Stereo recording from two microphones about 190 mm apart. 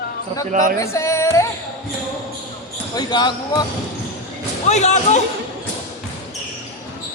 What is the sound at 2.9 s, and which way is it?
Speech, 20° left (ahead or behind).